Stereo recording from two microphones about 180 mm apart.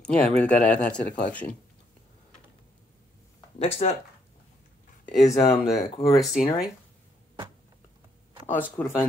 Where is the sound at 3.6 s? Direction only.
35° left (ahead or behind).